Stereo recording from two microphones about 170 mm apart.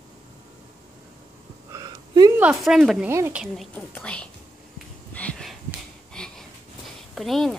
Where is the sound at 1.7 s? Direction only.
25° right (ahead or behind).